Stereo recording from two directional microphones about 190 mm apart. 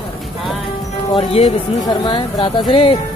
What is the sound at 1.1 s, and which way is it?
Speech, 30° left (ahead or behind).